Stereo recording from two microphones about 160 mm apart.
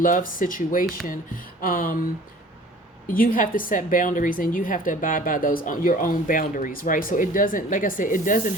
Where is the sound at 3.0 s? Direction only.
60° left (ahead or behind).